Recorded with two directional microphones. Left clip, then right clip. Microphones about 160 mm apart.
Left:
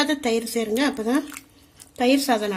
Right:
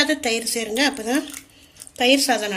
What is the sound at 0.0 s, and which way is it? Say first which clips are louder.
A woman's voice: right 2 dB; 60° left (ahead or behind).